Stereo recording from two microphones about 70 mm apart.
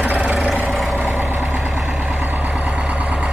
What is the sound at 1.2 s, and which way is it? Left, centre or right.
Vehicle, right.